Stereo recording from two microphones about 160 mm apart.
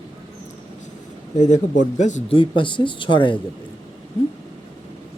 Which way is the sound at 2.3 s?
30° left (ahead or behind).